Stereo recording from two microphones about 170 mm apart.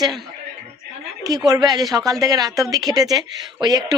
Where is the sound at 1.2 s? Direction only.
20° right (ahead or behind).